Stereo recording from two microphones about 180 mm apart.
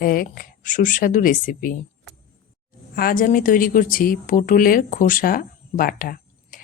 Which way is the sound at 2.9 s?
55° left (ahead or behind).